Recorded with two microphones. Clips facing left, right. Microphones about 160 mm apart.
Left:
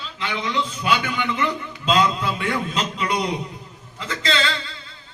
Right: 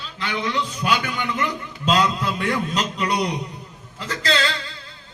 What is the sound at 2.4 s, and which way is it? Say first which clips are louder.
Speech: right 1 dB; 40° right (ahead or behind).